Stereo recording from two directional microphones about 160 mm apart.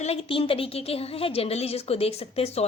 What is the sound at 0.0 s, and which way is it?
A woman's voice, 40° left (ahead or behind).